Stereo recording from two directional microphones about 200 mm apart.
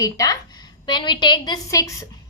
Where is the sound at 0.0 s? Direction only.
15° left (ahead or behind).